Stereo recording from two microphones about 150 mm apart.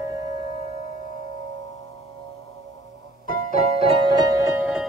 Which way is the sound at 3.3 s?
55° right (ahead or behind).